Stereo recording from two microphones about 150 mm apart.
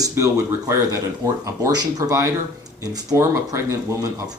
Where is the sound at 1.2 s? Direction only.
25° right (ahead or behind).